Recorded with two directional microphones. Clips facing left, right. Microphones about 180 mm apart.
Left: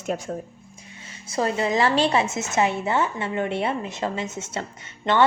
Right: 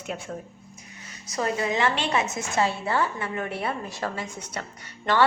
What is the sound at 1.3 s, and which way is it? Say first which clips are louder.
A woman's voice: left 3 dB; 30° left (ahead or behind).